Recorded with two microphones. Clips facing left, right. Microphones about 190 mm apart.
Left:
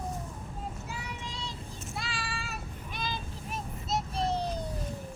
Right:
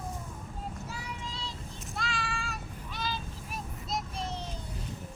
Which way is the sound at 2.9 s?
15° left (ahead or behind).